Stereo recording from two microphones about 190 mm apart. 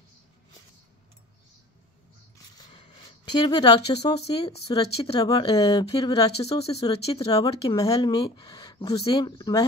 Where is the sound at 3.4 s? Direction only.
20° left (ahead or behind).